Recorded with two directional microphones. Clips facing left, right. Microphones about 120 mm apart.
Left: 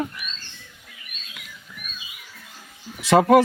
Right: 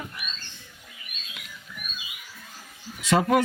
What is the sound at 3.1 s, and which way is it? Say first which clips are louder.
Speech: left 7 dB; 50° left (ahead or behind).